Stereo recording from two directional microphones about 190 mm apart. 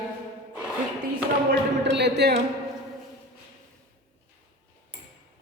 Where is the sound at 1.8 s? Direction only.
65° right (ahead or behind).